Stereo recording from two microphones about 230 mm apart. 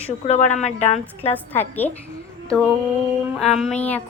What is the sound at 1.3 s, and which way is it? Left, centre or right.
Speech, centre.